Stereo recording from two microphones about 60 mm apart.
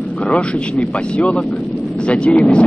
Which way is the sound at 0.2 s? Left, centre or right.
Centre.